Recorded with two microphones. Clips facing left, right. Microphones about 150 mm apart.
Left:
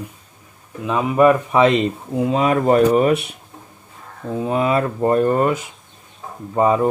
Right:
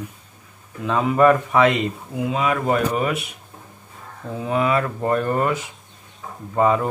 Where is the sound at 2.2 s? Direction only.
35° left (ahead or behind).